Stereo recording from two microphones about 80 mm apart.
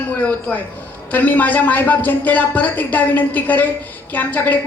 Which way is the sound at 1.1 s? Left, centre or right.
Left.